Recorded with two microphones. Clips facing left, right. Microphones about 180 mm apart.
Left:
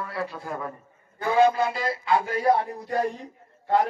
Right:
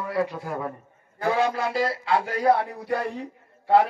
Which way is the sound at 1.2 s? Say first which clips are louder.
Left 3 dB; 80° right.